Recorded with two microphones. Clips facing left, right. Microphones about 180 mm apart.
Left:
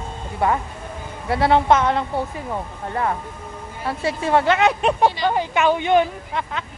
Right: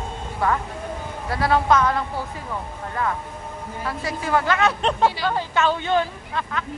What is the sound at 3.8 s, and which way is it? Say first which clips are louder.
A woman's voice: left 5 dB; 25° left (ahead or behind).